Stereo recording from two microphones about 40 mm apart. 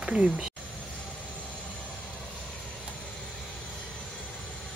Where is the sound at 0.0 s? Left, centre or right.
Centre.